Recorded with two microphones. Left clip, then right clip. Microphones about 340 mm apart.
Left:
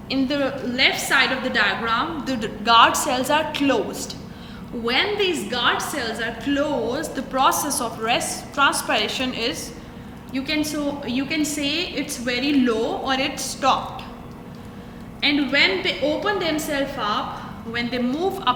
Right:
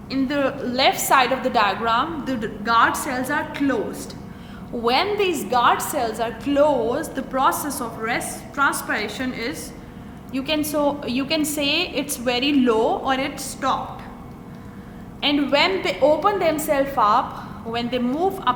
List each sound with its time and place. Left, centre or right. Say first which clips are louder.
0.1 s a woman's voice: even; centre
4.9 s a woman's voice: right 1 dB; centre
15.2 s a woman's voice: even; centre